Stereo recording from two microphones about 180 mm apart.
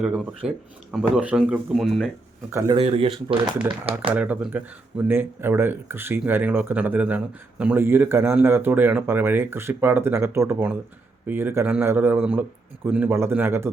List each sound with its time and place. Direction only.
0.0 s speech: 5° right (ahead or behind)
2.5 s speech: 15° right (ahead or behind)
2.7 s speech: 30° right (ahead or behind)
4.1 s speech: 5° right (ahead or behind)